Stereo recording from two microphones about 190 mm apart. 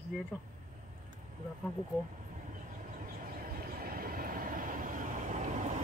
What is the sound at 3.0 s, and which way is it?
Vehicle, 50° right (ahead or behind).